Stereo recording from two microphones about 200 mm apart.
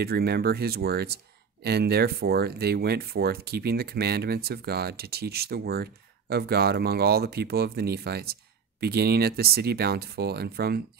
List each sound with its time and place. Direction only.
0.0 s speech: 50° right (ahead or behind)